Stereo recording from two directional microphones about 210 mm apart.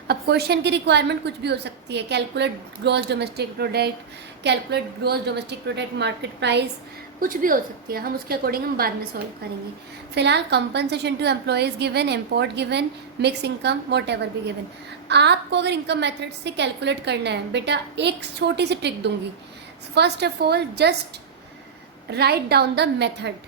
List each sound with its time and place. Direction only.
0.1 s a woman's voice: 50° right (ahead or behind)
7.2 s a woman's voice: 40° right (ahead or behind)
22.1 s a woman's voice: 50° right (ahead or behind)